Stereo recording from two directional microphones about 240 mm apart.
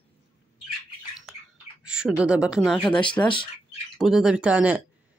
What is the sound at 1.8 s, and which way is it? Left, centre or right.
Speech, centre.